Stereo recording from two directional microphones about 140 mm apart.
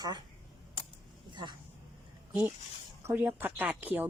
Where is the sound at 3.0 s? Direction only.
15° right (ahead or behind).